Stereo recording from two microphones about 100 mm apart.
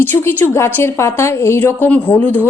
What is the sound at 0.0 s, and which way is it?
Speech, 20° left (ahead or behind).